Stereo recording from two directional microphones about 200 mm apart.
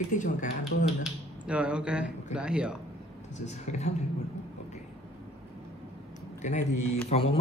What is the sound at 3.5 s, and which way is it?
Speech, 35° left (ahead or behind).